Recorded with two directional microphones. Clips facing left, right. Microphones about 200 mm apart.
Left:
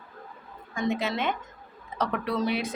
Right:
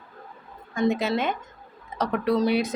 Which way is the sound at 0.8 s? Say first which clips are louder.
Right 5 dB; 40° right (ahead or behind).